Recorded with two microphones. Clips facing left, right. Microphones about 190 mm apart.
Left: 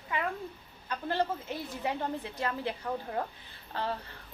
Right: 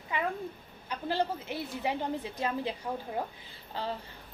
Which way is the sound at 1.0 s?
10° right (ahead or behind).